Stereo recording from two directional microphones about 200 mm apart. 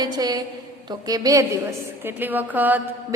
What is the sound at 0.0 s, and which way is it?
A woman's voice, 20° right (ahead or behind).